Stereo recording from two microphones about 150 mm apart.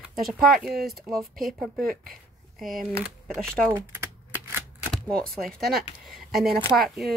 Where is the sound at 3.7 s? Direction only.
15° right (ahead or behind).